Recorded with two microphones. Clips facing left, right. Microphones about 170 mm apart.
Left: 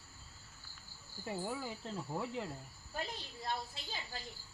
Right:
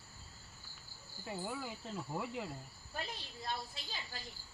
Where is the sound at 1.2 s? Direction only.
Centre (ahead or behind).